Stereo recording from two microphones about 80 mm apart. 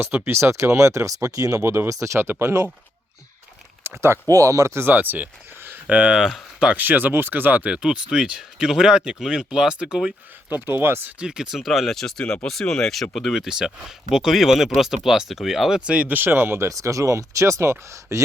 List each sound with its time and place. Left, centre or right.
0.3 s speech: right
3.8 s speech: right
4.3 s speech: right
5.9 s speech: centre
10.7 s speech: right
11.2 s speech: centre
16.0 s speech: right
16.6 s speech: right